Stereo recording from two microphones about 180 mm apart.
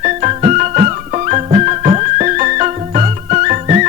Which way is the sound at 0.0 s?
35° right (ahead or behind).